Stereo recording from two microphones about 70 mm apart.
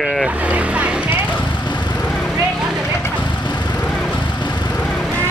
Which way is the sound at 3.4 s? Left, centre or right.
Left.